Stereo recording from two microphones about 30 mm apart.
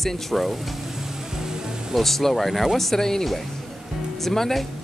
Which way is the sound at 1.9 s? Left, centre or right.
Centre.